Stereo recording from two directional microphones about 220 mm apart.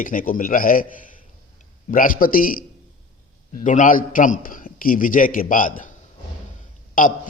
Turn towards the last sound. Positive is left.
turn(degrees=40)  # may be behind; listen again after turning